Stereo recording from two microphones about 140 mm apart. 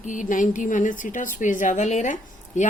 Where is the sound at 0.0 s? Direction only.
65° left (ahead or behind).